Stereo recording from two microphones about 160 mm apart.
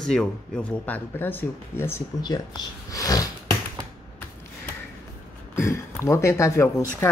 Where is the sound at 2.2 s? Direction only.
25° left (ahead or behind).